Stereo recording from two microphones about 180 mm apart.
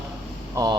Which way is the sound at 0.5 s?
20° right (ahead or behind).